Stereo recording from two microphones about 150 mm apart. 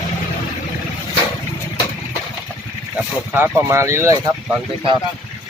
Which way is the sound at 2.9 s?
10° right (ahead or behind).